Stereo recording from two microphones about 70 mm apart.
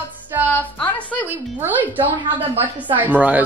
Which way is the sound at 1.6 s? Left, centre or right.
Right.